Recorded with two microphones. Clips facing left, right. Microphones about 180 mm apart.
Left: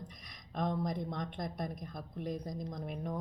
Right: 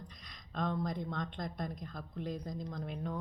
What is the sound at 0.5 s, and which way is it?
Speech, 20° left (ahead or behind).